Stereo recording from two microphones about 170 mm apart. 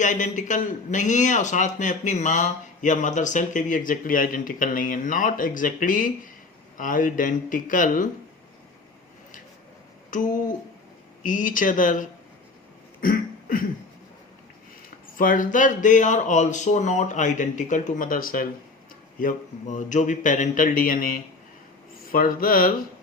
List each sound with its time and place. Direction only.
0.0 s a man's voice: 45° left (ahead or behind)
10.1 s a man's voice: 50° left (ahead or behind)
13.0 s a sound: 55° left (ahead or behind)
15.1 s a man's voice: 55° left (ahead or behind)